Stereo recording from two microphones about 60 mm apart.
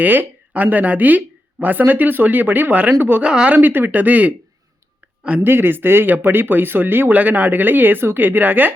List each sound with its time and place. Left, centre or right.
0.0 s speech: right
3.2 s speech: centre
3.6 s speech: right
5.4 s speech: right